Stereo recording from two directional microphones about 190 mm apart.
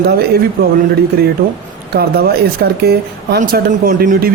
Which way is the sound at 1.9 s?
55° right (ahead or behind).